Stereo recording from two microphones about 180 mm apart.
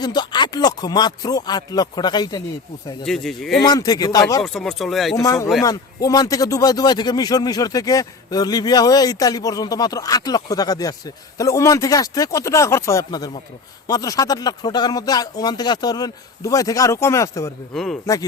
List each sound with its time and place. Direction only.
0.0 s a man's voice: 25° left (ahead or behind)
3.0 s speech: centre (ahead or behind)
3.6 s a man's voice: 20° left (ahead or behind)
4.4 s speech: centre (ahead or behind)
5.1 s a man's voice: 15° left (ahead or behind)